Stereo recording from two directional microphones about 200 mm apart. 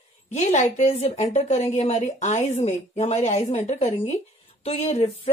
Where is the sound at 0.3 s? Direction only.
35° left (ahead or behind).